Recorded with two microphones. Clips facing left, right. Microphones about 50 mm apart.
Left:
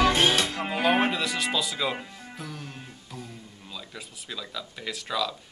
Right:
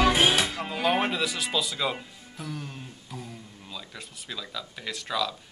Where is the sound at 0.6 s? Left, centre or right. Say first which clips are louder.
Left 2 dB; centre.